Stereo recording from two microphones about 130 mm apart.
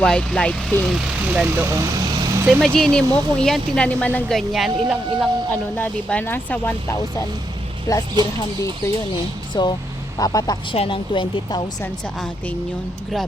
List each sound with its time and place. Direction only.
0.0 s speech: 5° left (ahead or behind)
0.9 s speech: 5° right (ahead or behind)
1.6 s vehicle: 25° right (ahead or behind)
2.6 s speech: 5° left (ahead or behind)
5.5 s speech: 15° left (ahead or behind)
7.9 s speech: 30° left (ahead or behind)
9.5 s speech: 35° left (ahead or behind)
11.8 s speech: 10° left (ahead or behind)